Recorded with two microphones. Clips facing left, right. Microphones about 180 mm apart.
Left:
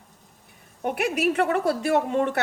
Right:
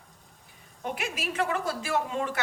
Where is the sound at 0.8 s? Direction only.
60° left (ahead or behind).